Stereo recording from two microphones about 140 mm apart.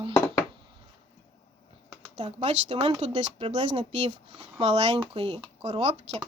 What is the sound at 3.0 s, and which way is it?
Speech, 55° right (ahead or behind).